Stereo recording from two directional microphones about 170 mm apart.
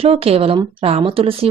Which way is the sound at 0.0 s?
35° right (ahead or behind).